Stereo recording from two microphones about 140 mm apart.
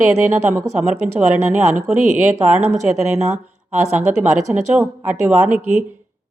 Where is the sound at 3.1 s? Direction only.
50° right (ahead or behind).